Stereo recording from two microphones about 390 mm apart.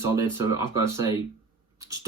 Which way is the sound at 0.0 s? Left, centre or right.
Centre.